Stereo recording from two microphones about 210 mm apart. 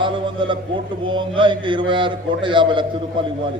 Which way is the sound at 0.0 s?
20° right (ahead or behind).